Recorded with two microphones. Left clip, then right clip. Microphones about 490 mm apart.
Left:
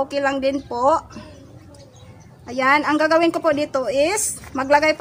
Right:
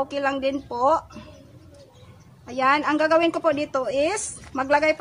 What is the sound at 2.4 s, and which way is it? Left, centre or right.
A woman's voice, right.